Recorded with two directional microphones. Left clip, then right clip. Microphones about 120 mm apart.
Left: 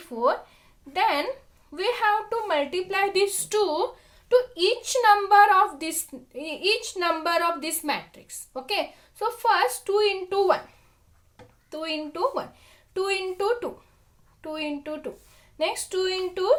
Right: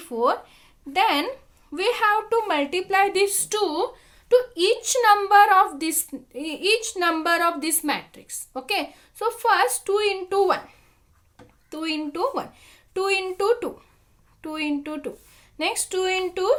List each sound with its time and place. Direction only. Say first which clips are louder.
0.1 s a woman's voice: right 2 dB; 60° right (ahead or behind); by 10.6 s 35° right (ahead or behind)
11.7 s a woman's voice: right 2 dB; 40° right (ahead or behind)